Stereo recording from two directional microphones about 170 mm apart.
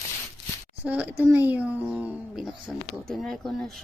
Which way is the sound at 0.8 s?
10° right (ahead or behind).